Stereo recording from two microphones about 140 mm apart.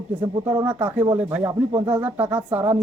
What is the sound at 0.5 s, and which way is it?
Speech, 40° right (ahead or behind).